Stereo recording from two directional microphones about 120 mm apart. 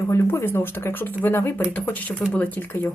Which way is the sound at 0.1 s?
20° left (ahead or behind).